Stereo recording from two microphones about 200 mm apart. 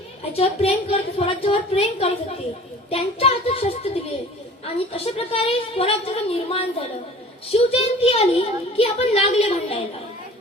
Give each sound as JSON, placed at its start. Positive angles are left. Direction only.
{"t": 0.3, "sound": "speech", "side_deg": 30}
{"t": 4.9, "sound": "speech", "side_deg": 30}